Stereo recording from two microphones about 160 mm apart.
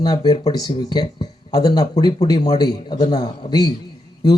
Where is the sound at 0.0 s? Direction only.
25° left (ahead or behind).